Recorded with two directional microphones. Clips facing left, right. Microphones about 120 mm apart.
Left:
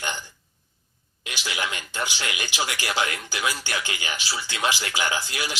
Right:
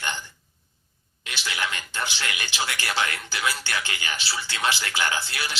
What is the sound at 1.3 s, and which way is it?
Speech, 15° left (ahead or behind).